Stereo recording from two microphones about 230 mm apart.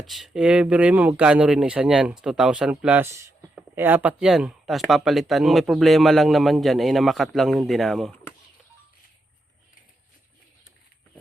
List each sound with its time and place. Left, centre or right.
0.0 s speech: centre